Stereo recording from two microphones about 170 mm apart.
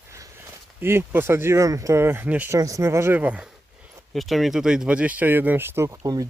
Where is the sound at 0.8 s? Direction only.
15° right (ahead or behind).